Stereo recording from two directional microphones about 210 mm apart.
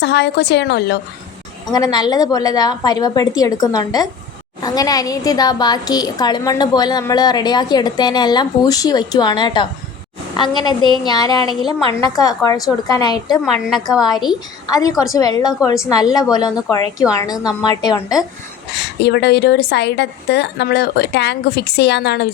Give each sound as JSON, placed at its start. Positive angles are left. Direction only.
{"t": 0.0, "sound": "a woman's voice", "side_deg": 55}
{"t": 1.7, "sound": "a woman's voice", "side_deg": 20}
{"t": 13.4, "sound": "a woman's voice", "side_deg": 0}
{"t": 14.3, "sound": "a woman's voice", "side_deg": 15}
{"t": 18.7, "sound": "a woman's voice", "side_deg": 50}